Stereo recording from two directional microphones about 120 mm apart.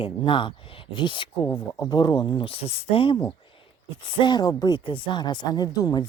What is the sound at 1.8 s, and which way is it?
Speech, 35° left (ahead or behind).